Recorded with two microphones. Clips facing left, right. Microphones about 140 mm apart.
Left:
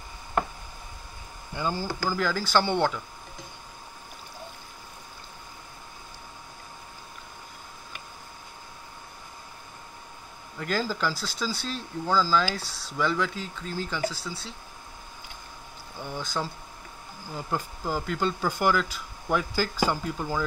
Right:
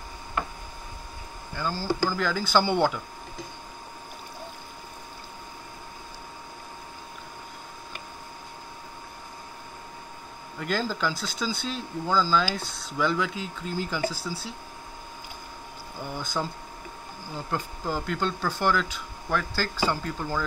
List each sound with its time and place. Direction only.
1.5 s speech: 20° left (ahead or behind)
2.0 s speech: 5° left (ahead or behind)
10.6 s speech: centre (ahead or behind)
16.0 s speech: centre (ahead or behind)
17.5 s speech: 5° left (ahead or behind)